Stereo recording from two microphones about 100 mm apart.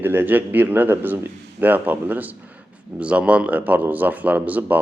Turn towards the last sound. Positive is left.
turn(degrees=-15)  # may be behind; listen again after turning